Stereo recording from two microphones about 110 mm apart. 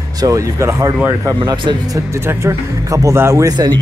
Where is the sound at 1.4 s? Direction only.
45° right (ahead or behind).